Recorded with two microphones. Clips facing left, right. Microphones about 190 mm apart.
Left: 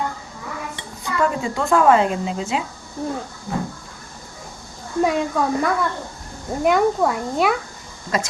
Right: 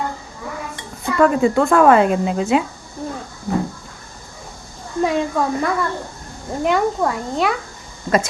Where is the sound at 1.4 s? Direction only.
55° right (ahead or behind).